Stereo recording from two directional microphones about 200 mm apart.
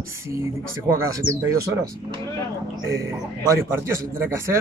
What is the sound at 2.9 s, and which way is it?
Speech, 15° right (ahead or behind).